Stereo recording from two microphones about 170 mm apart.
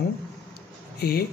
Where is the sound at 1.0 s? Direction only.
65° left (ahead or behind).